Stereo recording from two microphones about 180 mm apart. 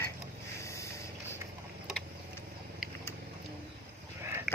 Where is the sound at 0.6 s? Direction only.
15° left (ahead or behind).